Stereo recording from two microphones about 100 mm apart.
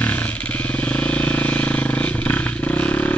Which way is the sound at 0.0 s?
15° left (ahead or behind).